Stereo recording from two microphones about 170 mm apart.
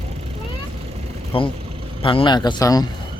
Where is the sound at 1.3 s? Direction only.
35° left (ahead or behind).